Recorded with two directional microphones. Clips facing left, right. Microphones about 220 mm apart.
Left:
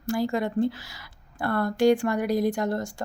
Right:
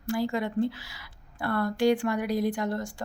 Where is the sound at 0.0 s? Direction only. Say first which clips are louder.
Left 2 dB; 45° left (ahead or behind).